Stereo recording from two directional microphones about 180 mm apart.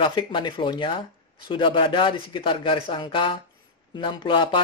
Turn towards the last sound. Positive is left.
turn(degrees=25)  # may be behind; listen again after turning